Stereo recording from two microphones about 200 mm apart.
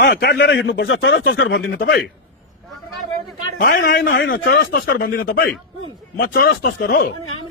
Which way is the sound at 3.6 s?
45° left (ahead or behind).